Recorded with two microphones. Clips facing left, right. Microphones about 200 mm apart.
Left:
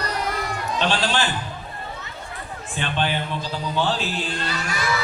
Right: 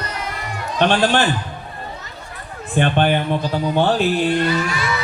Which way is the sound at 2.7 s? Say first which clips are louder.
Right 8 dB; 55° right (ahead or behind).